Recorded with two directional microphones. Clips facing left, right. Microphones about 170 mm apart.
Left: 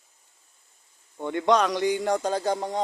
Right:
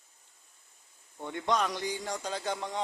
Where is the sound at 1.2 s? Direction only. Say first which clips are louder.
Left 8 dB; 90° left; by 2.8 s 40° left (ahead or behind).